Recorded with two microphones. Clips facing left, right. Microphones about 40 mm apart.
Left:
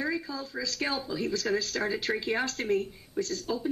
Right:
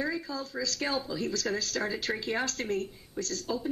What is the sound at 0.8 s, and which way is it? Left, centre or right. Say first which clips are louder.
Speech: left 1 dB; centre.